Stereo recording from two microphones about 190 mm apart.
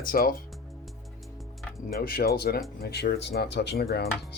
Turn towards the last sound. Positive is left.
turn(degrees=55)  # may be behind; listen again after turning